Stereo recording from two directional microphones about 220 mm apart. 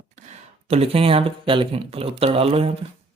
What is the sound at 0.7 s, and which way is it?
Speech, 25° right (ahead or behind).